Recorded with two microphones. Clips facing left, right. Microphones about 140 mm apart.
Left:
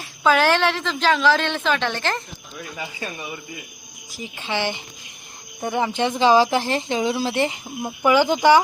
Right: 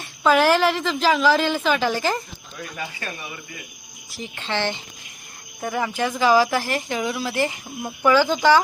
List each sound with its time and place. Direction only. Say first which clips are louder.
0.0 s a woman's voice: right 1 dB; centre (ahead or behind)
4.4 s speech: even; 15° left (ahead or behind)